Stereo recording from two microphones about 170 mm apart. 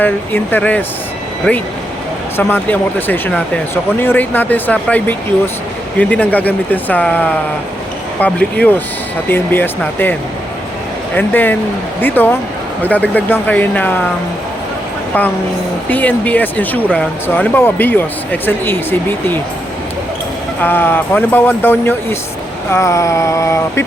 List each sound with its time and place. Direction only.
0.0 s speech: 10° left (ahead or behind)
15.9 s speech: 10° left (ahead or behind)
20.6 s speech: 10° left (ahead or behind)